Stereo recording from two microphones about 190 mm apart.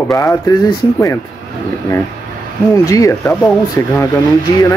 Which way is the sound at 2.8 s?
15° left (ahead or behind).